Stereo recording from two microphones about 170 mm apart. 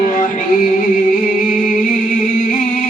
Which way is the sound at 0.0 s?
50° left (ahead or behind).